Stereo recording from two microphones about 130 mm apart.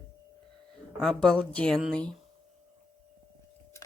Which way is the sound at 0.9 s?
5° left (ahead or behind).